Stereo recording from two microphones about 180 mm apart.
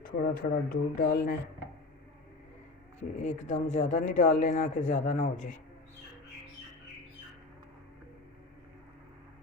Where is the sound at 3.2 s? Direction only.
45° left (ahead or behind).